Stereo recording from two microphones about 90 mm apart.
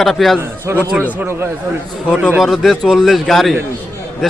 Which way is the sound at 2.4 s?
Centre (ahead or behind).